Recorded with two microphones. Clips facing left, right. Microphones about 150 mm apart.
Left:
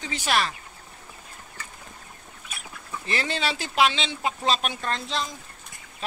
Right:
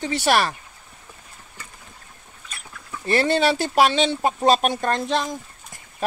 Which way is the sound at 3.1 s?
55° right (ahead or behind).